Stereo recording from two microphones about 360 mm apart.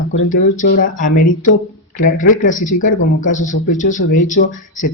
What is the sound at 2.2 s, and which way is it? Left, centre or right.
Speech, left.